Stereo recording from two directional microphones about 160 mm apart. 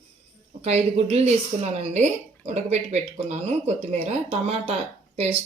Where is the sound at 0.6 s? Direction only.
40° right (ahead or behind).